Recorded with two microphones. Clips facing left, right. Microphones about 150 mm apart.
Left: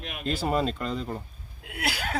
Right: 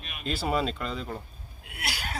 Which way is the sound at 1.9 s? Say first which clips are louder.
Left 5 dB; 90° left.